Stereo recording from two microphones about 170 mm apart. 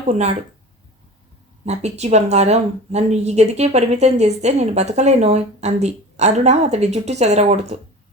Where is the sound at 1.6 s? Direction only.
40° right (ahead or behind).